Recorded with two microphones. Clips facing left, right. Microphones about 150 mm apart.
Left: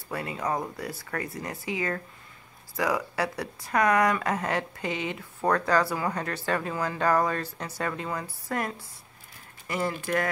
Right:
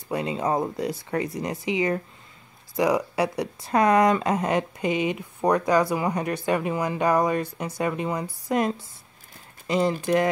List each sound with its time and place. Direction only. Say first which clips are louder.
0.1 s speech: right 5 dB; 20° right (ahead or behind)